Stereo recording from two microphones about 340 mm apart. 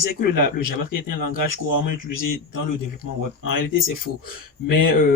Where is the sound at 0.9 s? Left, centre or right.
Left.